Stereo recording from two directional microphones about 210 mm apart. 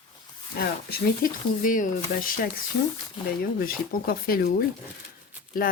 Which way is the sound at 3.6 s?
45° left (ahead or behind).